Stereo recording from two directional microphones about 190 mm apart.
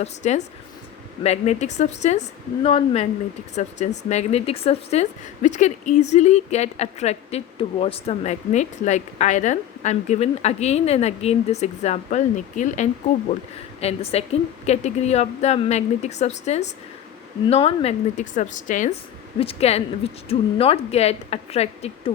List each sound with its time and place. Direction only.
0.0 s speech: 35° left (ahead or behind)
19.4 s speech: 30° left (ahead or behind)